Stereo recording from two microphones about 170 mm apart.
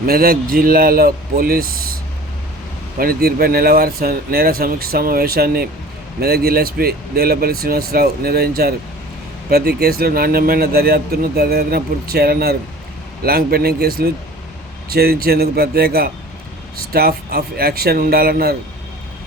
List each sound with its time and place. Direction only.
0.0 s speech: 60° right (ahead or behind)
3.0 s speech: 65° right (ahead or behind)